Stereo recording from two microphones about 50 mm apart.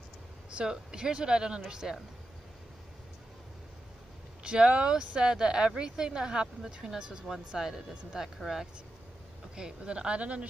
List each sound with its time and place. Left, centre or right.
0.6 s a woman's voice: centre
4.4 s a woman's voice: centre
9.6 s speech: centre